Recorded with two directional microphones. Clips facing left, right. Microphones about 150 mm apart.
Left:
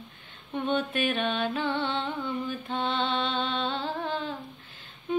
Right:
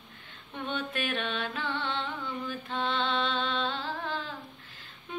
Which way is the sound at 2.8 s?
Centre (ahead or behind).